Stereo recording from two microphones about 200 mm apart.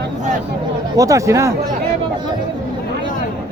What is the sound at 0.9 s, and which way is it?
Speech, 15° right (ahead or behind).